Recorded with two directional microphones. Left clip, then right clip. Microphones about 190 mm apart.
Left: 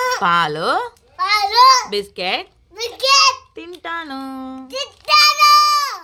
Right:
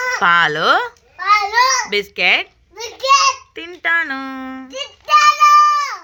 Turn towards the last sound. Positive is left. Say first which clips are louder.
# even
turn(degrees=30)  # may be behind; listen again after turning